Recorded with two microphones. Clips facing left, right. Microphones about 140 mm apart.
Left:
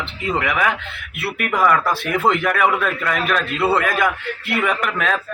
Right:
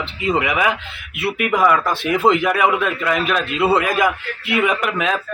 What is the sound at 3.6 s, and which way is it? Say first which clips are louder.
Speech: right 2 dB; 20° right (ahead or behind).